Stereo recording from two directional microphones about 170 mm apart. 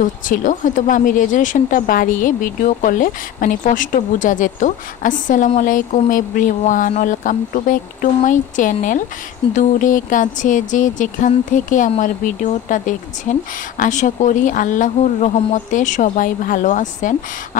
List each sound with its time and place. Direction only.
0.0 s speech: 50° left (ahead or behind)